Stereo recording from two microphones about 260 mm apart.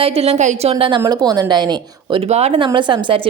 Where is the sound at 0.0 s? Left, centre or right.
Right.